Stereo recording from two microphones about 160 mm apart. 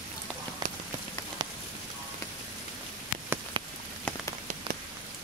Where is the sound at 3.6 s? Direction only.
30° right (ahead or behind).